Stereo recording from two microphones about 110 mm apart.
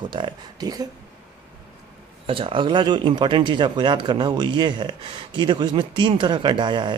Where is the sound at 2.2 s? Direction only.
50° right (ahead or behind).